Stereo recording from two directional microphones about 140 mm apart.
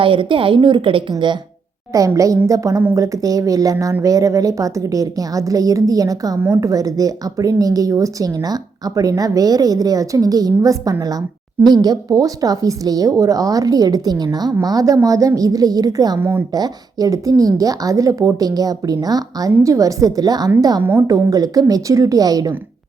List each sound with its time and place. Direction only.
0.0 s a woman's voice: 35° right (ahead or behind)